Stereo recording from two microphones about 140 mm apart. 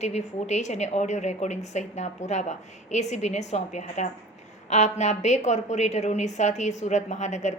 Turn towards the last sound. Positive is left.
turn(degrees=60)  # may be behind; listen again after turning